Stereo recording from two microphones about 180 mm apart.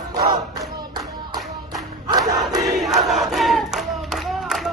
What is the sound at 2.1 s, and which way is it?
Crowd, 20° right (ahead or behind).